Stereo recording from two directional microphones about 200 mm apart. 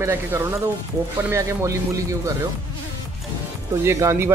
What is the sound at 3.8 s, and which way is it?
Speech, 15° right (ahead or behind).